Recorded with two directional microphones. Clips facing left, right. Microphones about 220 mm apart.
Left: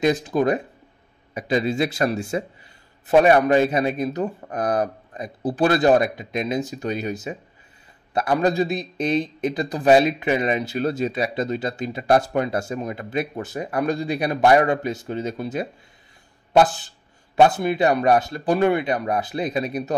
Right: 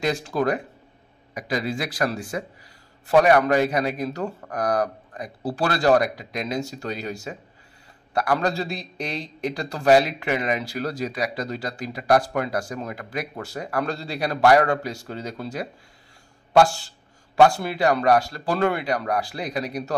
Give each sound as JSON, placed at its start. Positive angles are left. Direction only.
{"t": 0.0, "sound": "a man's voice", "side_deg": 20}